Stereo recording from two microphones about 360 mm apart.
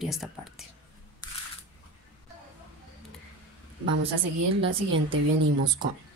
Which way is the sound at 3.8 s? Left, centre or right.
Right.